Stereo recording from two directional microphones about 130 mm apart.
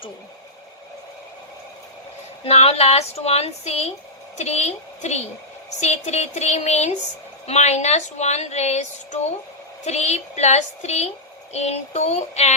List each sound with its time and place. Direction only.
2.4 s a woman's voice: 55° left (ahead or behind)